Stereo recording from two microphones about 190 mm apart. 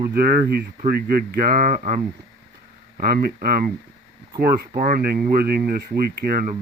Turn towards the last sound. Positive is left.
turn(degrees=-55)  # may be behind; listen again after turning